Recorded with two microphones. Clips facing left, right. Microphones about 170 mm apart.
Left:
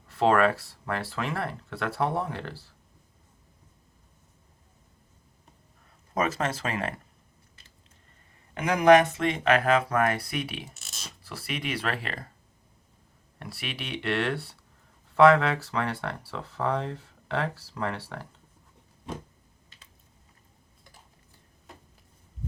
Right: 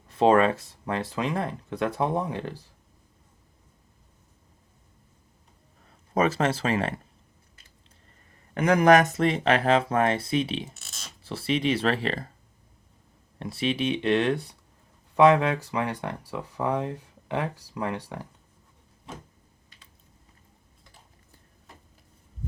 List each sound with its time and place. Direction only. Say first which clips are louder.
0.1 s speech: right 3 dB; 20° right (ahead or behind)
6.1 s speech: right 4 dB; 30° right (ahead or behind)
8.6 s speech: even; 50° right (ahead or behind); by 12.3 s 30° right (ahead or behind)
13.4 s speech: right 11 dB; 20° right (ahead or behind)